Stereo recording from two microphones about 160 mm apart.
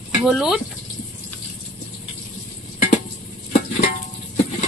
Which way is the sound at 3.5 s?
65° left (ahead or behind).